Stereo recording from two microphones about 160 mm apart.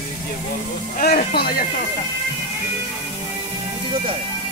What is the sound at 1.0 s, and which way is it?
Speech, 70° left (ahead or behind).